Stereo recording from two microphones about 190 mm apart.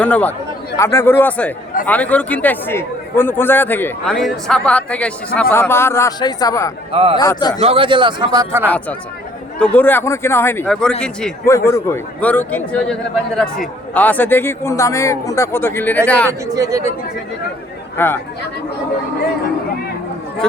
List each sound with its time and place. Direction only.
0.0 s a man's voice: 10° left (ahead or behind)
6.9 s a man's voice: 30° right (ahead or behind)
7.2 s a man's voice: 20° left (ahead or behind)
7.6 s a man's voice: 30° right (ahead or behind)
9.6 s a man's voice: 10° left (ahead or behind)
16.5 s speech: 15° right (ahead or behind)
17.9 s speech: 10° left (ahead or behind)
20.4 s speech: 5° left (ahead or behind)